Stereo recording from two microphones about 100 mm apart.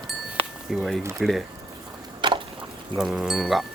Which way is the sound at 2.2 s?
55° right (ahead or behind).